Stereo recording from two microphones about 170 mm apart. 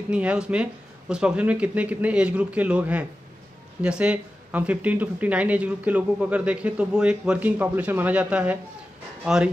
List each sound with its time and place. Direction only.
0.1 s speech: 5° right (ahead or behind)